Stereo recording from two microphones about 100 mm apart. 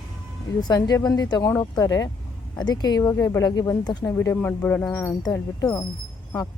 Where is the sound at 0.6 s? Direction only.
40° left (ahead or behind).